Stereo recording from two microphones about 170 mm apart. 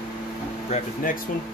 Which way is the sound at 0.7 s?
50° left (ahead or behind).